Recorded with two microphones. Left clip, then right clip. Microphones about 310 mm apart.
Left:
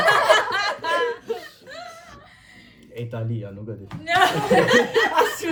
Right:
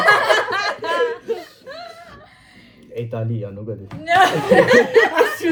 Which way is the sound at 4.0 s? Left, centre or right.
Centre.